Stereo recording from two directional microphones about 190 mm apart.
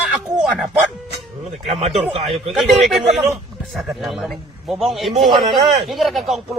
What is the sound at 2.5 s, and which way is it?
Speech, centre (ahead or behind).